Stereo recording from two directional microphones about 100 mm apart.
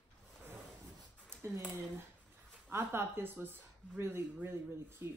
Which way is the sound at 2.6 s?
25° right (ahead or behind).